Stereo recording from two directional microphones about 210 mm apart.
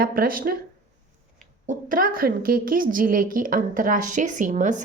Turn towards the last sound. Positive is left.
turn(degrees=-35)  # may be behind; listen again after turning